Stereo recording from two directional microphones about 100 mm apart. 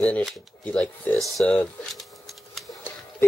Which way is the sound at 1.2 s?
Centre (ahead or behind).